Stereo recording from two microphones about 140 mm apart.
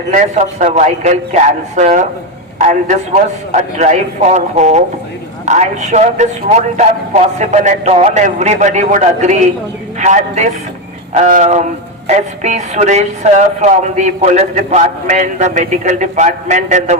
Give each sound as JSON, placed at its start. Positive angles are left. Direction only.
{"t": 0.1, "sound": "speech", "side_deg": -60}